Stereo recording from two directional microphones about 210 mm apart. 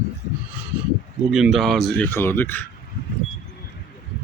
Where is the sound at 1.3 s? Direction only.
Centre (ahead or behind).